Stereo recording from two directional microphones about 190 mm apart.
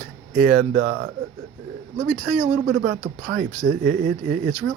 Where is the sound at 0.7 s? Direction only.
60° right (ahead or behind).